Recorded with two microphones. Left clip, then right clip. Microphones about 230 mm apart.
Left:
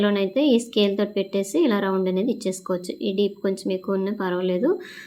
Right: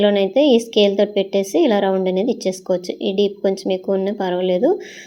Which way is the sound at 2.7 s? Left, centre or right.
Left.